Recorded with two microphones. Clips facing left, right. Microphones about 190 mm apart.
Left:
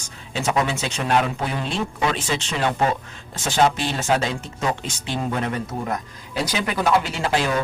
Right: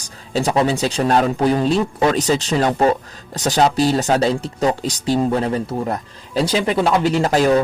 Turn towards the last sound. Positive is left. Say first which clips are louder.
# right 8 dB
turn(degrees=-40)  # may be behind; listen again after turning